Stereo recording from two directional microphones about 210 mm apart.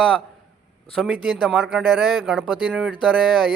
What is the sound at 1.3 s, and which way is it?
A man's voice, centre (ahead or behind).